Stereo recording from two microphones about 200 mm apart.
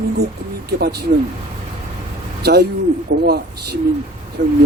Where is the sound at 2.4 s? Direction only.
55° right (ahead or behind).